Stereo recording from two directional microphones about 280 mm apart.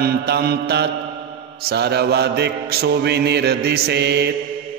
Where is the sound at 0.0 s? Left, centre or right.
Right.